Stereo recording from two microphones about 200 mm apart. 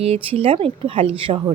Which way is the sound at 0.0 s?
30° right (ahead or behind).